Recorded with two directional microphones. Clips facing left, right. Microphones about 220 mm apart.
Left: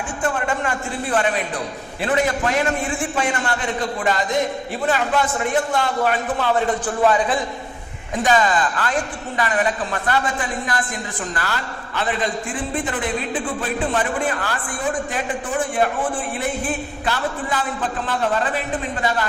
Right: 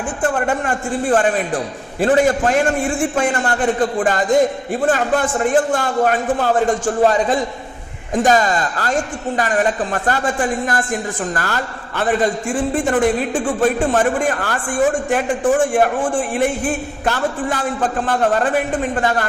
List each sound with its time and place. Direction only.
0.2 s a man's voice: 50° right (ahead or behind)